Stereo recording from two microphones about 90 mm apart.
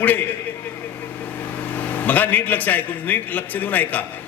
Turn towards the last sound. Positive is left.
turn(degrees=20)  # may be behind; listen again after turning